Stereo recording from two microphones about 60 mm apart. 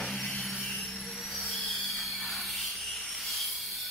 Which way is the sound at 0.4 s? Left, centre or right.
Centre.